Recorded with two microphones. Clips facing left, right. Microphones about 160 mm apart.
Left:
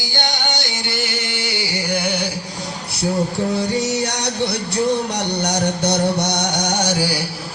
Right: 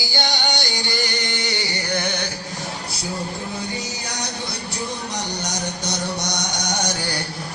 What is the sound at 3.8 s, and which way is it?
Music, 85° left.